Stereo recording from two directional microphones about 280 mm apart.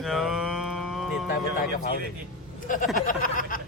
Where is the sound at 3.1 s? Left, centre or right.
Left.